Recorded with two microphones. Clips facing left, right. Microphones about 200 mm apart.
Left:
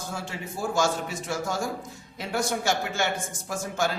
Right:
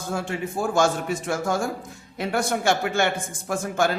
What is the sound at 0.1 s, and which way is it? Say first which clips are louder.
A man's voice: right 11 dB; 55° right (ahead or behind).